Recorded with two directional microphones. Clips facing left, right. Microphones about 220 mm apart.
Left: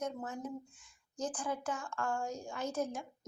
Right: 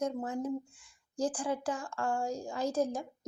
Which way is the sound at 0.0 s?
30° right (ahead or behind).